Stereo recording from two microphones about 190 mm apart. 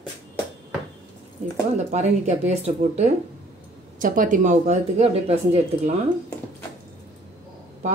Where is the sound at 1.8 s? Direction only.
35° right (ahead or behind).